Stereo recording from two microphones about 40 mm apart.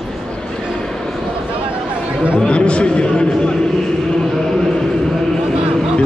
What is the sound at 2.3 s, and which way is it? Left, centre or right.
A man's voice, left.